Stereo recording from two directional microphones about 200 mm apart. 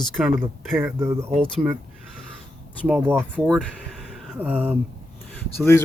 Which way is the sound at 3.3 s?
5° left (ahead or behind).